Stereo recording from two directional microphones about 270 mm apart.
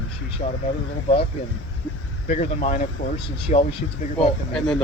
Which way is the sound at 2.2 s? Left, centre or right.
Left.